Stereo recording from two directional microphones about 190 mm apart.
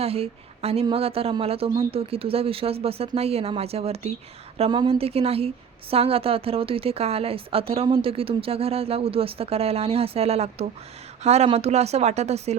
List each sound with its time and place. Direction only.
0.0 s a woman's voice: 30° right (ahead or behind)